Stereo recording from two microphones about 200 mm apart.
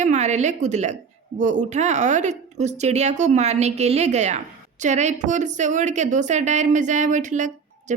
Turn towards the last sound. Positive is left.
turn(degrees=-35)  # may be behind; listen again after turning